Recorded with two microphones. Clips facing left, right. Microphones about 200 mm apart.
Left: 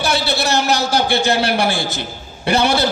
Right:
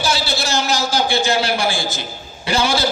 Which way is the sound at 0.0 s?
60° left (ahead or behind).